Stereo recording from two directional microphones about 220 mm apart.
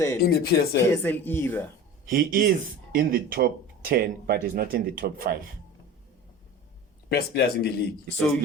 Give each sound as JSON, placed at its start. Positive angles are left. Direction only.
{"t": 0.2, "sound": "speech", "side_deg": 45}
{"t": 0.9, "sound": "speech", "side_deg": 10}
{"t": 2.0, "sound": "speech", "side_deg": -40}
{"t": 7.1, "sound": "speech", "side_deg": 45}